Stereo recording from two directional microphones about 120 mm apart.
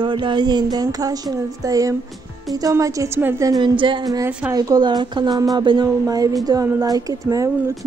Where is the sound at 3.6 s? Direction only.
45° right (ahead or behind).